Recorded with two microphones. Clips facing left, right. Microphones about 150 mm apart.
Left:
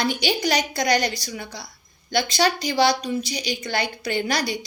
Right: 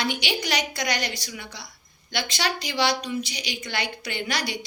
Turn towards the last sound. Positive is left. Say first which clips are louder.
# left 5 dB
turn(degrees=40)  # may be behind; listen again after turning